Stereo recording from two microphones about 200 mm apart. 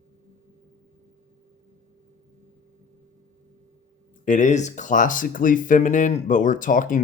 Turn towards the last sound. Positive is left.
turn(degrees=40)  # may be behind; listen again after turning